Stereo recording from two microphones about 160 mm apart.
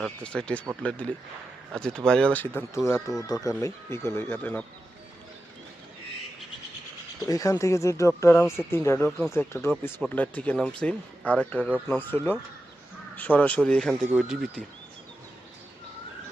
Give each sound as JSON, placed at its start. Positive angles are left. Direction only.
{"t": 0.0, "sound": "speech", "side_deg": 5}
{"t": 7.3, "sound": "speech", "side_deg": 20}